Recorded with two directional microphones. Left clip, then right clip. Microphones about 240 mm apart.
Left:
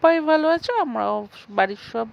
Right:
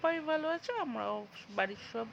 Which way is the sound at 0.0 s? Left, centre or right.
Left.